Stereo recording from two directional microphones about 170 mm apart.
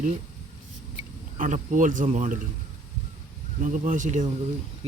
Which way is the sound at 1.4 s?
50° right (ahead or behind).